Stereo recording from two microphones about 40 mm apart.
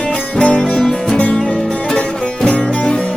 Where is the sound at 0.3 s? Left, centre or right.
Left.